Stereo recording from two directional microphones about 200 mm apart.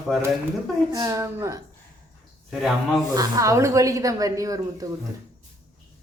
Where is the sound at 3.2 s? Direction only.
15° right (ahead or behind).